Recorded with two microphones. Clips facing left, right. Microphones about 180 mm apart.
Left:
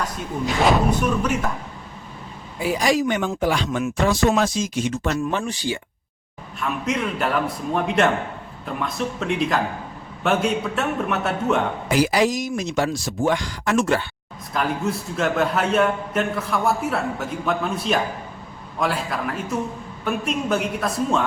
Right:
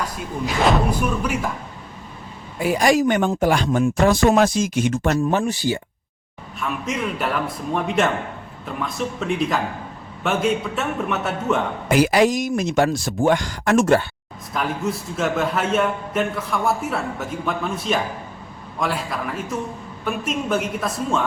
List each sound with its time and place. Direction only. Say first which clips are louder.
0.6 s a man's voice: even; centre (ahead or behind)
2.6 s speech: right 3 dB; 50° right (ahead or behind)
5.4 s speech: right 4 dB; 40° right (ahead or behind)
6.6 s a man's voice: left 1 dB; centre (ahead or behind)
11.9 s speech: right 4 dB; 55° right (ahead or behind)
14.5 s a man's voice: left 1 dB; centre (ahead or behind)